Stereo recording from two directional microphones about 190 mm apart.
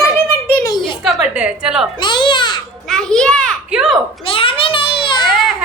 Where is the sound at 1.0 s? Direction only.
Centre (ahead or behind).